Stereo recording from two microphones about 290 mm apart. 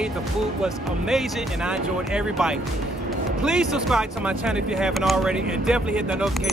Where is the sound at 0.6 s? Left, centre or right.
Centre.